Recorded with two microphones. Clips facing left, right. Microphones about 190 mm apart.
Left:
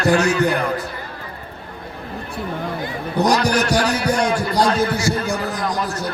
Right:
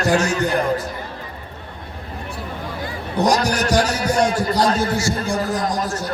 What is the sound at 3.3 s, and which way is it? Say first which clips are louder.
A man's voice: even; 35° right (ahead or behind).